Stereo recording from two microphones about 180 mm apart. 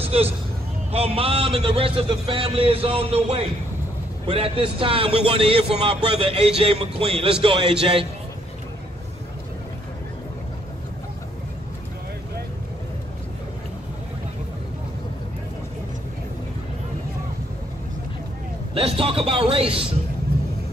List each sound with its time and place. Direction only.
0.0 s hubbub: 35° right (ahead or behind)
0.9 s a man's voice: 35° right (ahead or behind)
18.8 s a man's voice: 30° right (ahead or behind)